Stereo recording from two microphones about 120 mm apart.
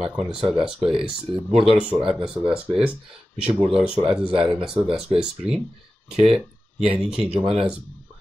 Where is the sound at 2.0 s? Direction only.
45° right (ahead or behind).